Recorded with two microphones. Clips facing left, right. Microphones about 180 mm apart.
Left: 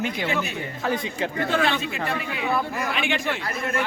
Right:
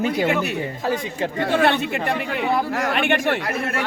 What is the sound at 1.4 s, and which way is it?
A man's voice, 65° right (ahead or behind).